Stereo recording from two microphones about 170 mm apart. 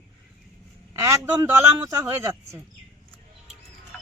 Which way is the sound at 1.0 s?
15° right (ahead or behind).